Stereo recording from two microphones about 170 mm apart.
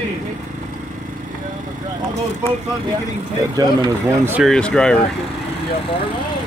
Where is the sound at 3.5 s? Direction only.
25° right (ahead or behind).